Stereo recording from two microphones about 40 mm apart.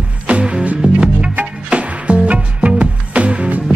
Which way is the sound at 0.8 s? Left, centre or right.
Right.